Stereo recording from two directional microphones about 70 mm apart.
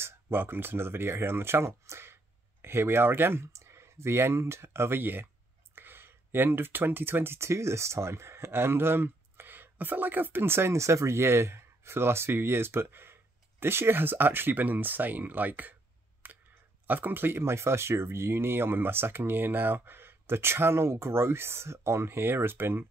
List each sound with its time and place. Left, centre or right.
0.0 s speech: right
16.2 s clicking: right
16.8 s speech: right